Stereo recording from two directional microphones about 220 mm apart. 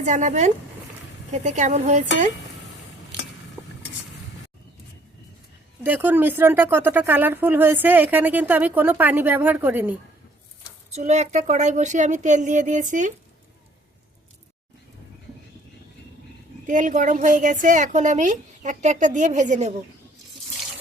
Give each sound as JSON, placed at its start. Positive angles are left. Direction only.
{"t": 0.0, "sound": "a woman's voice", "side_deg": -35}
{"t": 5.8, "sound": "a woman's voice", "side_deg": -10}
{"t": 10.9, "sound": "a woman's voice", "side_deg": -30}
{"t": 16.6, "sound": "a woman's voice", "side_deg": -35}